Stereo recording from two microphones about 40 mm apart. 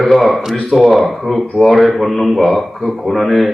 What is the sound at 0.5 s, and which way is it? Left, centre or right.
Speech, centre.